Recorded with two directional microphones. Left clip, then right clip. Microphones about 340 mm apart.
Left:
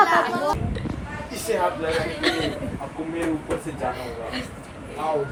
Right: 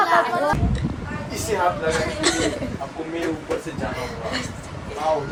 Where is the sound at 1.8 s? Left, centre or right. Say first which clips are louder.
Right 2 dB; centre.